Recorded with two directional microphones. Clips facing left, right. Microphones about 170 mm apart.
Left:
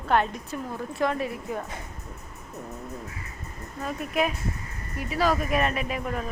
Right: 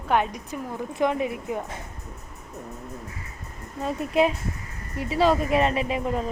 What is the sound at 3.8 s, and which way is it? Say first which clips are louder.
A woman's voice: right 5 dB; 25° right (ahead or behind).